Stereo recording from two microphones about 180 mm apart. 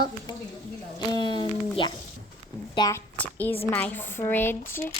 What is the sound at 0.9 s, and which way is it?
Speech, 25° left (ahead or behind).